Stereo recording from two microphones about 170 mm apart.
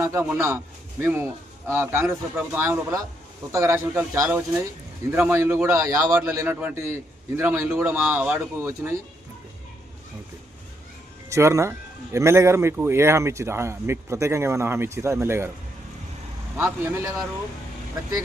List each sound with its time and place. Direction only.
0.0 s a man's voice: 15° right (ahead or behind)
11.3 s a man's voice: 15° right (ahead or behind)
16.6 s a man's voice: 15° right (ahead or behind)